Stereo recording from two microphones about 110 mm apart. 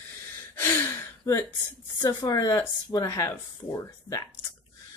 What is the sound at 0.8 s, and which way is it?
Gasp, 25° left (ahead or behind).